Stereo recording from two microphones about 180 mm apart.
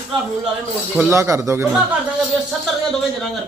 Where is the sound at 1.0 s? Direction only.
15° right (ahead or behind).